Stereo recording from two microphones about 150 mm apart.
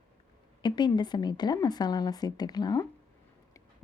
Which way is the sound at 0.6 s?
30° left (ahead or behind).